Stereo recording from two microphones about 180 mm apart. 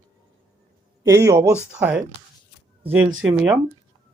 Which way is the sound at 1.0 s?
20° right (ahead or behind).